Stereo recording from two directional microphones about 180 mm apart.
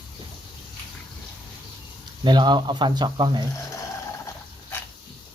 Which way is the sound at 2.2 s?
25° right (ahead or behind).